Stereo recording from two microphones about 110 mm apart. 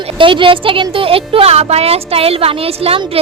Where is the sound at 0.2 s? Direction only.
50° right (ahead or behind).